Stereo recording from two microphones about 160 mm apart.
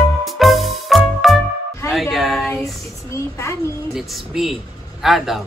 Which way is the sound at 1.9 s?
Centre (ahead or behind).